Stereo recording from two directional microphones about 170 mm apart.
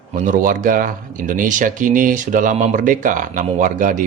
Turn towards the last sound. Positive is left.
turn(degrees=-50)  # may be behind; listen again after turning